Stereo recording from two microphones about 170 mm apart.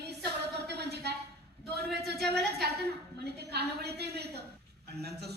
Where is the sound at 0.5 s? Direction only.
75° right (ahead or behind).